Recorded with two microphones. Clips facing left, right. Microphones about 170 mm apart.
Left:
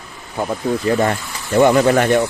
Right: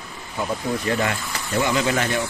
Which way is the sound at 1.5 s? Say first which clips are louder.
Left 9 dB; 55° left (ahead or behind).